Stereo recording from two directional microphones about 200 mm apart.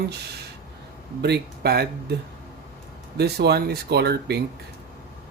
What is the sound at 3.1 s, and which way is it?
Speech, 55° right (ahead or behind).